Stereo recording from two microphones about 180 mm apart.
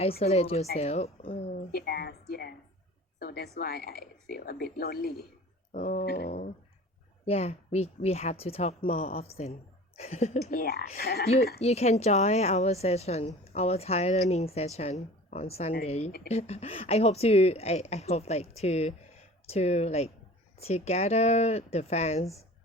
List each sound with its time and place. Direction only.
0.2 s a woman's voice: 35° left (ahead or behind)
1.7 s speech: 60° left (ahead or behind)
3.2 s speech: 55° left (ahead or behind)
5.7 s a sound: 40° left (ahead or behind)
6.1 s speech: 60° left (ahead or behind)
7.3 s a woman's voice: 35° left (ahead or behind)
10.4 s speech: 55° left (ahead or behind)
11.6 s a woman's voice: 35° left (ahead or behind)